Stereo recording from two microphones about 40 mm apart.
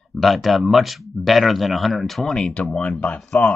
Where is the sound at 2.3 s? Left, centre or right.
Left.